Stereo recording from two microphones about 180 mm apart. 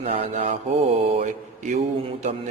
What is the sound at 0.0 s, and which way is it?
A man's voice, 35° right (ahead or behind).